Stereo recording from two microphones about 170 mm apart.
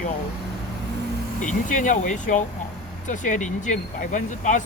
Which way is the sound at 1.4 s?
50° left (ahead or behind).